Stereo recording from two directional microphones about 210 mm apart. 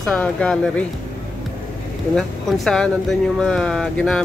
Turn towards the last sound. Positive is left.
turn(degrees=5)  # may be behind; listen again after turning